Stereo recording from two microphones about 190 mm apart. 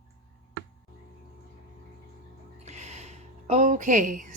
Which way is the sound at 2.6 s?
35° right (ahead or behind).